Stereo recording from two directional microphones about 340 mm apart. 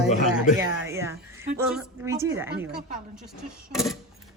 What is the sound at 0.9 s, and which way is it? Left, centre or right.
A woman's voice, centre.